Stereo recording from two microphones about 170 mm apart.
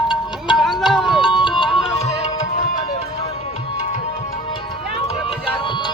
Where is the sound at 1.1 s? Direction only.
30° left (ahead or behind).